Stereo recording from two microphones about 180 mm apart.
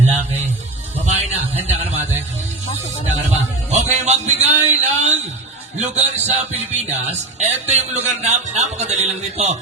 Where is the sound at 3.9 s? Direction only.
40° right (ahead or behind).